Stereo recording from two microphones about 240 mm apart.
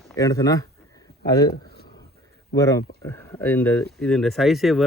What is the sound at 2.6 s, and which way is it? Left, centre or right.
Speech, centre.